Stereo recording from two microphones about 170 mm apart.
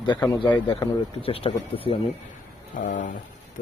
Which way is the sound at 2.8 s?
50° left (ahead or behind).